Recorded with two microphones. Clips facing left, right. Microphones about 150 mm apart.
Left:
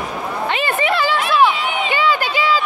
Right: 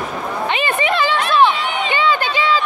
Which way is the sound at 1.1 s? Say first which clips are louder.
Right 1 dB; 5° left (ahead or behind).